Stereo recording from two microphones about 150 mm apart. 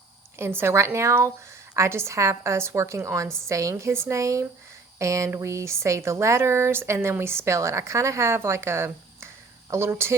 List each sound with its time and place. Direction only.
0.3 s a woman's voice: 15° right (ahead or behind)